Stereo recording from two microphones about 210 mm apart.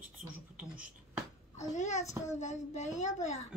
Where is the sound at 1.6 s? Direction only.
35° left (ahead or behind).